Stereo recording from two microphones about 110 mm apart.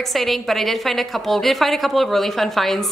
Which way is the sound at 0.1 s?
Centre (ahead or behind).